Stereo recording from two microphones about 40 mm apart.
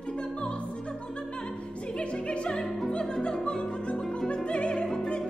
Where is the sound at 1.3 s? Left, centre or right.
Left.